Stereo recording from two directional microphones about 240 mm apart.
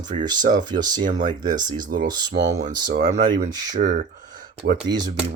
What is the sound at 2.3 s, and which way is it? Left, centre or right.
Speech, right.